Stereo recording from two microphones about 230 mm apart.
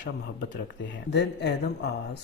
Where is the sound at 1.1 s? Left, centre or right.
Left.